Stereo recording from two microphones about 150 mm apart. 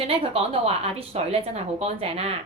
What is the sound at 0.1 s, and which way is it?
A woman's voice, 40° right (ahead or behind).